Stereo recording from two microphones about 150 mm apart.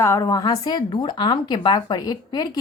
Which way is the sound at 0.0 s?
20° left (ahead or behind).